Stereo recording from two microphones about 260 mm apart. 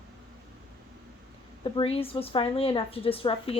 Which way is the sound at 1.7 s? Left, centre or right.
Left.